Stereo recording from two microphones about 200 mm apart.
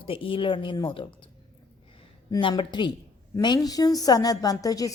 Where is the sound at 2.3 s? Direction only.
20° left (ahead or behind).